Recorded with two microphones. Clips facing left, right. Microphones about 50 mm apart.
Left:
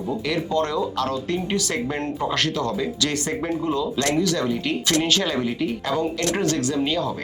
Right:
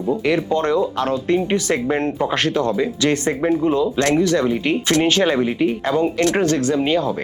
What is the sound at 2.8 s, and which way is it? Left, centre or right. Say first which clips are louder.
Speech: right 6 dB; right.